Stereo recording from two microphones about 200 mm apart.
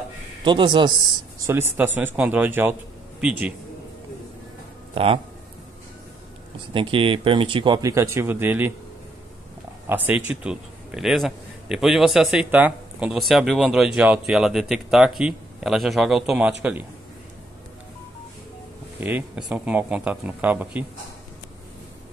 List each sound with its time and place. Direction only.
0.4 s speech: 25° right (ahead or behind)
1.4 s a man's voice: 10° right (ahead or behind)
4.9 s speech: 25° right (ahead or behind)
6.7 s speech: 25° right (ahead or behind)
9.8 s a man's voice: 10° right (ahead or behind)
18.9 s speech: 10° right (ahead or behind)